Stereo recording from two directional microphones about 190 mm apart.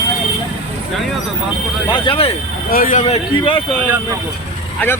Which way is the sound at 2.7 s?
45° left (ahead or behind).